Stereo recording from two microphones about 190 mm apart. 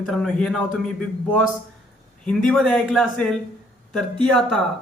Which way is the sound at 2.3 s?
Centre (ahead or behind).